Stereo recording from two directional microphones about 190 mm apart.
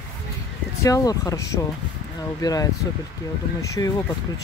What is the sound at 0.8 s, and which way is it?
Speech, 20° left (ahead or behind).